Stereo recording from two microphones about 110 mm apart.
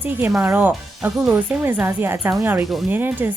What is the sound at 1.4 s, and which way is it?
A woman's voice, 15° right (ahead or behind).